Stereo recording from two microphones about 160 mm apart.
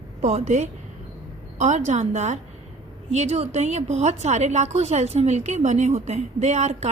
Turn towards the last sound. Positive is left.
turn(degrees=-45)  # may be behind; listen again after turning